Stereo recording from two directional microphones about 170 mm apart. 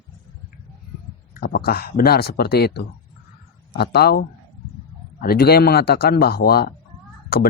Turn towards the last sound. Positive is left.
turn(degrees=60)  # may be behind; listen again after turning